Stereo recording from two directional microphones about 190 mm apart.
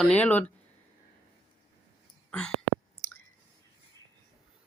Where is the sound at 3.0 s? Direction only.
35° left (ahead or behind).